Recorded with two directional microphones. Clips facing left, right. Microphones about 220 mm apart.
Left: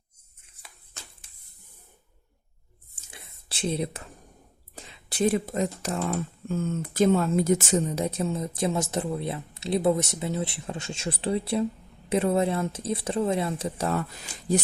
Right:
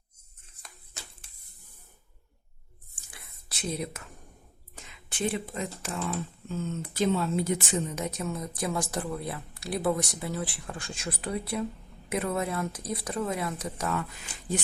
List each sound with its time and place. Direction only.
3.1 s whispering: 25° left (ahead or behind)
4.7 s speech: 35° left (ahead or behind)
6.1 s speech: 50° left (ahead or behind)